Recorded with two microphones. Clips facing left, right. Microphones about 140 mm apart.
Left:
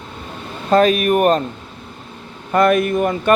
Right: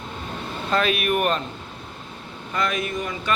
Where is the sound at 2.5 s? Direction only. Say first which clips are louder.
Left 11 dB; 55° left (ahead or behind).